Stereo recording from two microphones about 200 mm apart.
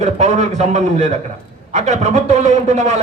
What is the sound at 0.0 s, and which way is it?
A man's voice, 35° right (ahead or behind).